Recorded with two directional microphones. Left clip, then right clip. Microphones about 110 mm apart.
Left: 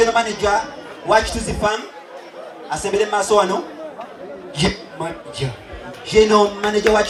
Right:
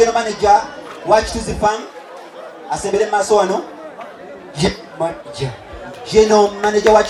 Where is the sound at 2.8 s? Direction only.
35° left (ahead or behind).